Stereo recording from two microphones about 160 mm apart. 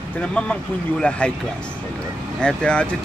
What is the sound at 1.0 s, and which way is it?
Speech, 5° left (ahead or behind).